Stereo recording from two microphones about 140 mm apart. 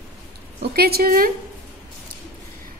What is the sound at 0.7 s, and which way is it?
Speech, 90° right.